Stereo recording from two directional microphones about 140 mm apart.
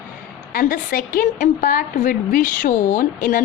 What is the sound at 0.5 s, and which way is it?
A woman's voice, 85° left.